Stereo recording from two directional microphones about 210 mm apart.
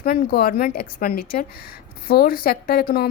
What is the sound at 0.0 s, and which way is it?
Speech, 45° left (ahead or behind).